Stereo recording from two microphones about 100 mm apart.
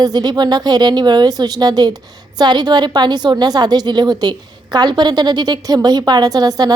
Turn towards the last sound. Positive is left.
turn(degrees=-40)  # may be behind; listen again after turning